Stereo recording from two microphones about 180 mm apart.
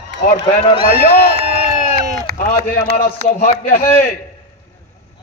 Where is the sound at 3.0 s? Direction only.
55° left (ahead or behind).